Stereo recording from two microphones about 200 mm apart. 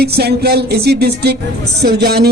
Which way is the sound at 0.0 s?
55° right (ahead or behind).